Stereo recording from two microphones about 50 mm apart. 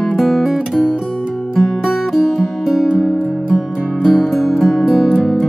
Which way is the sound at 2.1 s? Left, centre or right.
Centre.